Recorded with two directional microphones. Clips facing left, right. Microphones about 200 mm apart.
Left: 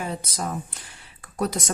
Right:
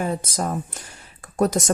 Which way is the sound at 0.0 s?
45° right (ahead or behind).